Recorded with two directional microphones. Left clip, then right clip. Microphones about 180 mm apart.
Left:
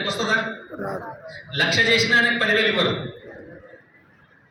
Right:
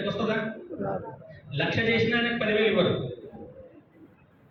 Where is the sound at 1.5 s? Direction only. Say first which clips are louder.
Left 8 dB; 15° left (ahead or behind).